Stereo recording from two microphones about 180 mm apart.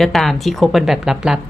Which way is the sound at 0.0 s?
Centre (ahead or behind).